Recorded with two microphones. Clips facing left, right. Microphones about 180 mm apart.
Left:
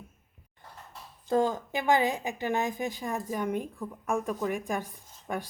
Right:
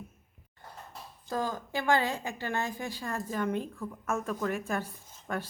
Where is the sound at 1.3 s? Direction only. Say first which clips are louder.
Left 6 dB; 25° left (ahead or behind).